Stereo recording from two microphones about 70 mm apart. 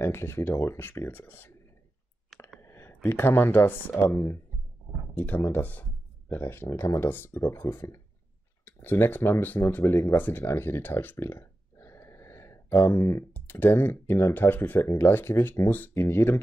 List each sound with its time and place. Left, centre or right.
0.0 s speech: left
2.6 s speech: left
5.1 s speech: left
13.3 s speech: left